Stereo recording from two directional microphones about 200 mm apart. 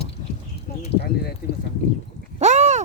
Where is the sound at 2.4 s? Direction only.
35° right (ahead or behind).